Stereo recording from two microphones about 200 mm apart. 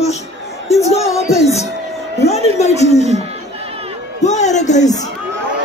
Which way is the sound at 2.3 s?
35° left (ahead or behind).